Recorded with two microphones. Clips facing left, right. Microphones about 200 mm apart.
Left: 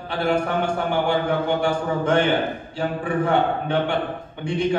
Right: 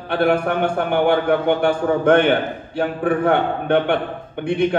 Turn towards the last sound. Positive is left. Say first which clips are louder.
# right 5 dB
turn(degrees=-60)  # may be behind; listen again after turning